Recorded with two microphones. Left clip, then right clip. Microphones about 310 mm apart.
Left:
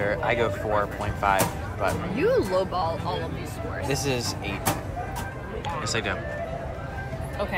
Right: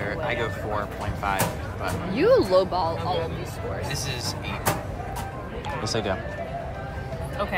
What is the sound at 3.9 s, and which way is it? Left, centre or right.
Speech, centre.